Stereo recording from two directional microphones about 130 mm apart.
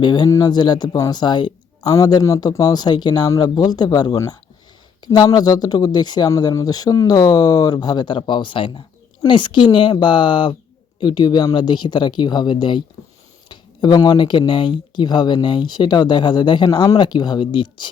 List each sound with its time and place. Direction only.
0.0 s speech: 35° left (ahead or behind)